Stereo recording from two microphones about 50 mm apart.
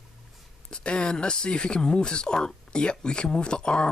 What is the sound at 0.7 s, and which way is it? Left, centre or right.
Speech, centre.